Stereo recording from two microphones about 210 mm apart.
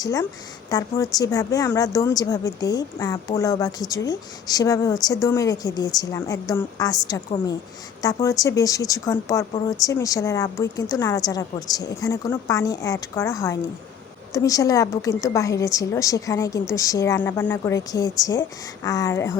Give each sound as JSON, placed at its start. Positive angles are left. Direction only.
{"t": 0.0, "sound": "speech", "side_deg": 15}